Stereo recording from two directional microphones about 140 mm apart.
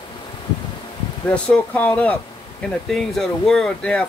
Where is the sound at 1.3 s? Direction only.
10° left (ahead or behind).